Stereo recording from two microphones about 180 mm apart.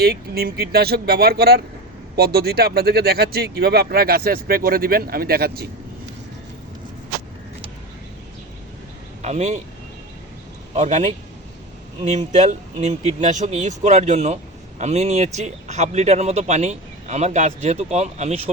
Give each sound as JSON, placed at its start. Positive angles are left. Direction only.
{"t": 0.0, "sound": "speech", "side_deg": -60}
{"t": 9.2, "sound": "speech", "side_deg": -40}
{"t": 10.8, "sound": "speech", "side_deg": -40}